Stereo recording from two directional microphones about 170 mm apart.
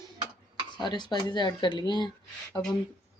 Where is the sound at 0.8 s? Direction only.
25° left (ahead or behind).